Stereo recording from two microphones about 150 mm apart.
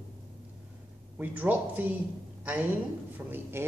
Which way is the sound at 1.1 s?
10° right (ahead or behind).